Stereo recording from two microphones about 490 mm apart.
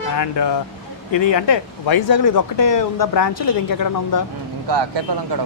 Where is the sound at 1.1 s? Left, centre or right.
Left.